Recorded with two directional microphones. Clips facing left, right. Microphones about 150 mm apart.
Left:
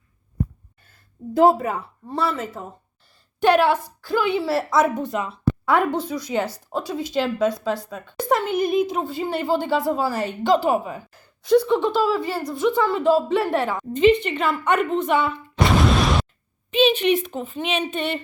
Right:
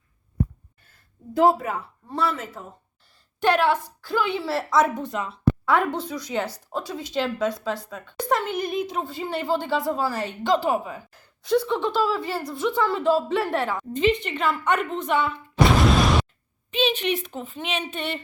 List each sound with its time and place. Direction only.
1.3 s speech: 30° left (ahead or behind)
3.4 s speech: 10° left (ahead or behind)
11.1 s speech: centre (ahead or behind)